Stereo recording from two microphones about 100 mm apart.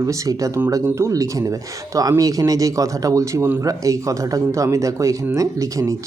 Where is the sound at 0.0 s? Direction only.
35° right (ahead or behind).